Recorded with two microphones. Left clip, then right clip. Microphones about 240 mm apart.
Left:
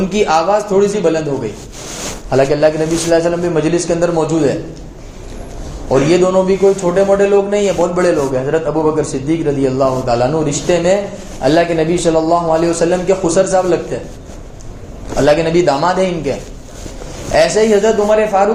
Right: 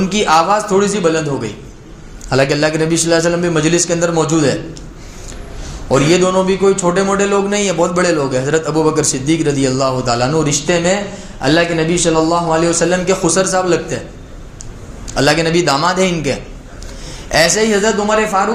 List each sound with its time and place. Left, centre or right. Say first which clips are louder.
0.0 s a man's voice: right 1 dB; right
2.3 s a man's voice: left 2 dB; right
5.9 s a man's voice: left 1 dB; right
15.1 s a man's voice: left 2 dB; right
17.3 s a man's voice: left 2 dB; right